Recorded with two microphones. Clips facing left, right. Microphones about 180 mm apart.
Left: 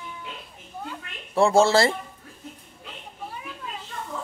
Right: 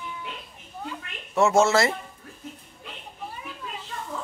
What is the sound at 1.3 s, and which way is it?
Speech, 30° left (ahead or behind).